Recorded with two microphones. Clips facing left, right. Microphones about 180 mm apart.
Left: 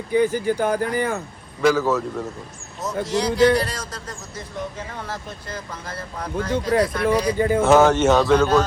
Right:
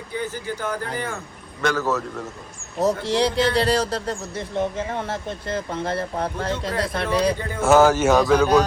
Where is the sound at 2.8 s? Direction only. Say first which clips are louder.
Right 3 dB; 30° right (ahead or behind).